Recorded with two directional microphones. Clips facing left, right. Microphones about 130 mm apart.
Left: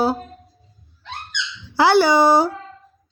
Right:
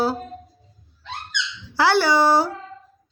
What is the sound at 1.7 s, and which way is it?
Speech, 15° left (ahead or behind).